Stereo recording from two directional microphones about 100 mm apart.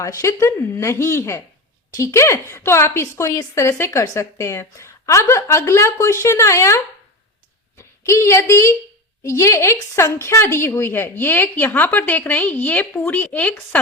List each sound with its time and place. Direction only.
0.0 s a woman's voice: 35° left (ahead or behind); by 13.6 s 15° left (ahead or behind)